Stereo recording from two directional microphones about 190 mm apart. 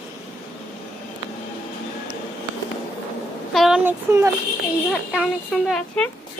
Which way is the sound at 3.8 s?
15° right (ahead or behind).